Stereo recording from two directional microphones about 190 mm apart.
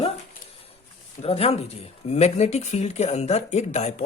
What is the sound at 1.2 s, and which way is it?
Speech, 30° left (ahead or behind).